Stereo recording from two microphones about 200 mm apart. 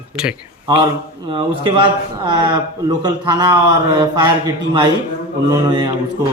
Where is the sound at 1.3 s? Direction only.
25° right (ahead or behind).